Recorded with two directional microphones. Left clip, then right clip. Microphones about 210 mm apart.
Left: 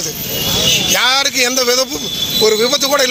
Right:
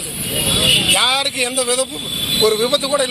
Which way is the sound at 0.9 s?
40° left (ahead or behind).